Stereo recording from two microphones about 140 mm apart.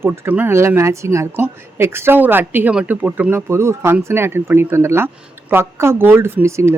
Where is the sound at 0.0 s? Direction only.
15° right (ahead or behind).